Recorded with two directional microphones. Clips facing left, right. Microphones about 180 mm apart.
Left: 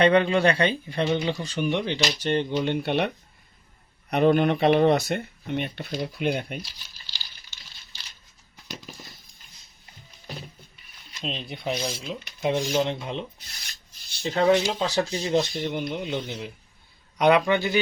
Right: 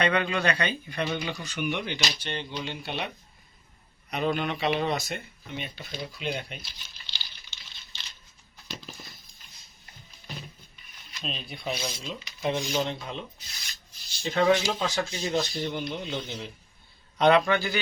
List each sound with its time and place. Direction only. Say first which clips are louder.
0.0 s speech: left 7 dB; 30° left (ahead or behind)
2.2 s speech: left 10 dB; 50° left (ahead or behind)
4.1 s speech: left 8 dB; 55° left (ahead or behind)
5.9 s speech: left 6 dB; 50° left (ahead or behind)
11.1 s speech: left 4 dB; 25° left (ahead or behind)
14.3 s a man's voice: left 2 dB; 35° left (ahead or behind)